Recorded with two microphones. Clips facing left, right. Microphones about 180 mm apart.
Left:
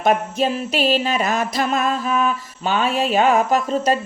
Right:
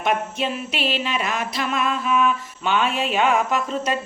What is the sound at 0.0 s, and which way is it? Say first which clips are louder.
Music: left 5 dB; 40° left (ahead or behind).